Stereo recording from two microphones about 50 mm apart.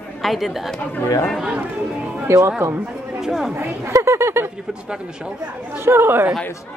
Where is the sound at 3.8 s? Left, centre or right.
Right.